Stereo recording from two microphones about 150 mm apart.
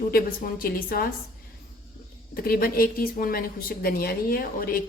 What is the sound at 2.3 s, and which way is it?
A woman's voice, 80° left.